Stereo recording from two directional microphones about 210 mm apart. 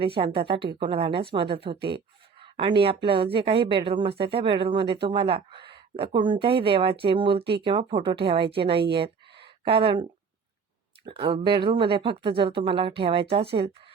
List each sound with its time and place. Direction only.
0.0 s speech: 25° right (ahead or behind)
8.9 s a sound: 25° right (ahead or behind)
11.0 s speech: 25° right (ahead or behind)